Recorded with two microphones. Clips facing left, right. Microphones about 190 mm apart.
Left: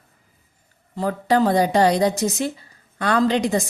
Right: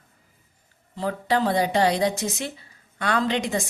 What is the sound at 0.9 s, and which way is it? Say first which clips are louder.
A woman's voice: left 4 dB; 45° left (ahead or behind).